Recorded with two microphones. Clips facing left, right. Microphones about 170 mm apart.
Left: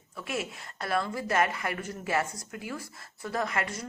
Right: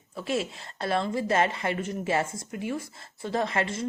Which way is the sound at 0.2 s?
30° right (ahead or behind).